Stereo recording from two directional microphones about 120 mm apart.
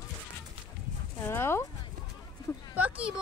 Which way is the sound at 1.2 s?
20° left (ahead or behind).